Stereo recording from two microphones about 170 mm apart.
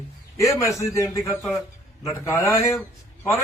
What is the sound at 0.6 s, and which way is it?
A man's voice, 20° left (ahead or behind).